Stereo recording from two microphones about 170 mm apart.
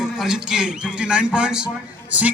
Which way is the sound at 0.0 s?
5° right (ahead or behind).